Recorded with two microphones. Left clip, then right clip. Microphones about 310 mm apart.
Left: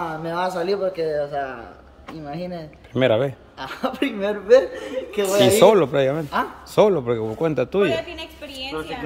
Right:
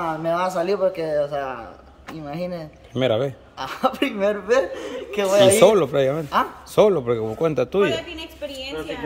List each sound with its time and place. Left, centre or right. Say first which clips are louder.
0.0 s a man's voice: right 2 dB; centre
2.9 s speech: left 2 dB; centre
3.5 s a man's voice: right 7 dB; centre
5.6 s speech: left 1 dB; centre
8.1 s a woman's voice: right 2 dB; centre